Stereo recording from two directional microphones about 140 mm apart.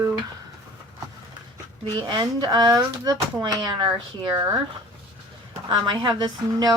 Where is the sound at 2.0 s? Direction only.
35° right (ahead or behind).